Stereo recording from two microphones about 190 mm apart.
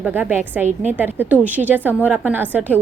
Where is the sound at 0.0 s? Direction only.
10° right (ahead or behind).